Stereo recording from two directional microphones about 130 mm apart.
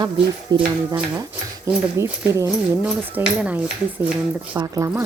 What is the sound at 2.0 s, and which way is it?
Speech, 20° right (ahead or behind).